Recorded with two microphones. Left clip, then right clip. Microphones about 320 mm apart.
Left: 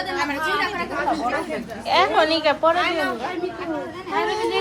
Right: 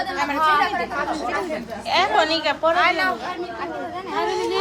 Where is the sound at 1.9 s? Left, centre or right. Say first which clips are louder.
Left 1 dB; centre.